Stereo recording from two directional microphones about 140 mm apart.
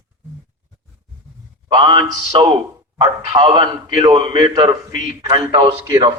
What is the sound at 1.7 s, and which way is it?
A man's voice, 35° right (ahead or behind).